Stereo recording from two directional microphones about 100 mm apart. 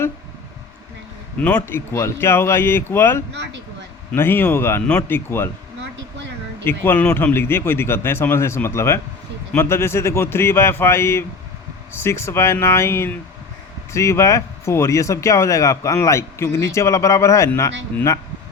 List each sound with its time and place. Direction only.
1.4 s a man's voice: 15° left (ahead or behind)
1.6 s speech: 25° left (ahead or behind)
6.7 s speech: 20° left (ahead or behind)